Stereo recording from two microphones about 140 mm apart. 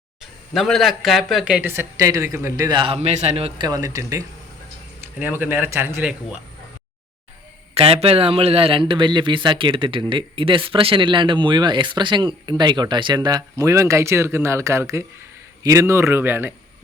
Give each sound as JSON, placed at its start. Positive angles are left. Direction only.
{"t": 0.2, "sound": "speech", "side_deg": 0}
{"t": 3.6, "sound": "speech", "side_deg": -25}
{"t": 5.2, "sound": "speech", "side_deg": -15}
{"t": 7.7, "sound": "a man's voice", "side_deg": -45}